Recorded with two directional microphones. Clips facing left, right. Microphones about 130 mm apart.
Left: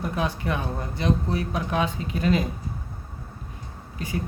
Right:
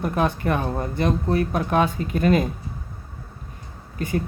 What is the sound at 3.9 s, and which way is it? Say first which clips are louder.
Speech: right 6 dB; 50° right (ahead or behind).